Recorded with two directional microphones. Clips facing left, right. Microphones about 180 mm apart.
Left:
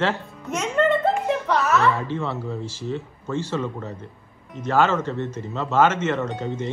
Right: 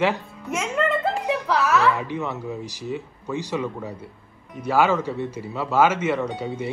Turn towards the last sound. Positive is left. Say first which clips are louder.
# even
turn(degrees=-10)  # may be behind; listen again after turning